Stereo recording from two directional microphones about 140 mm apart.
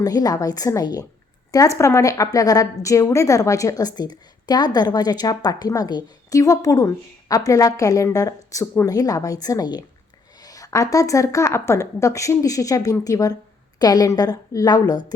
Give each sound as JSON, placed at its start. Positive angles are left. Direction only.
{"t": 0.0, "sound": "a woman's voice", "side_deg": 25}